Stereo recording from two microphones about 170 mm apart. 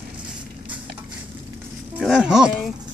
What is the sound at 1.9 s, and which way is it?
Speech, centre (ahead or behind).